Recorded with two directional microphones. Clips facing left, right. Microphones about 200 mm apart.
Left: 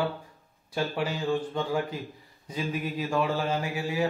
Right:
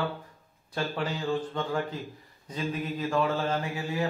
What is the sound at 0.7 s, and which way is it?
Mantra, 10° left (ahead or behind).